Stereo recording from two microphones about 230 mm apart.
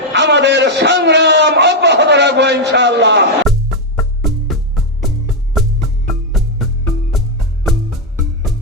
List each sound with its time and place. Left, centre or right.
0.1 s a sound: right
3.5 s music: centre
7.7 s music: centre